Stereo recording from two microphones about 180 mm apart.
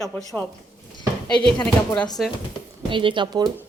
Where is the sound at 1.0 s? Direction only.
25° left (ahead or behind).